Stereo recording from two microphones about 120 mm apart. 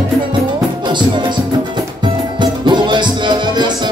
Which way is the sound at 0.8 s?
40° right (ahead or behind).